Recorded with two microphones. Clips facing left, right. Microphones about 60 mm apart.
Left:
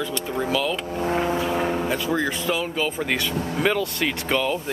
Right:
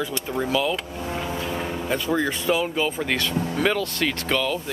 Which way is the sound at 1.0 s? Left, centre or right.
Left.